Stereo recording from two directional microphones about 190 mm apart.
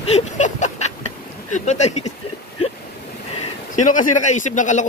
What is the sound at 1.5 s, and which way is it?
Speech, 40° left (ahead or behind).